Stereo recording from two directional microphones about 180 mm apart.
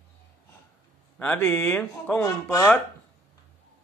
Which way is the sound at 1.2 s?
10° left (ahead or behind).